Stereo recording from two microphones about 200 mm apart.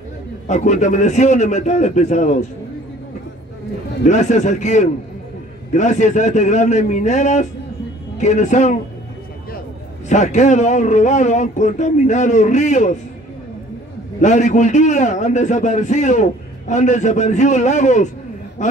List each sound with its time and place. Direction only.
0.5 s a man's voice: 35° left (ahead or behind)
4.0 s a man's voice: 35° left (ahead or behind)
10.0 s a man's voice: 35° left (ahead or behind)
14.2 s a man's voice: 35° left (ahead or behind)